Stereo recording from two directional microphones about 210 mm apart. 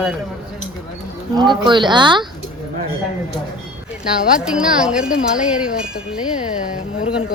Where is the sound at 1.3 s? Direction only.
20° right (ahead or behind).